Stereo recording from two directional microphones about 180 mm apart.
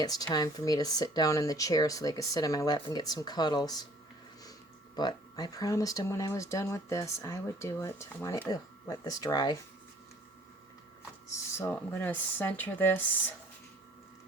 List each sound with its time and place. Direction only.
0.0 s speech: 20° left (ahead or behind)
4.9 s speech: 25° left (ahead or behind)
11.5 s speech: 10° left (ahead or behind)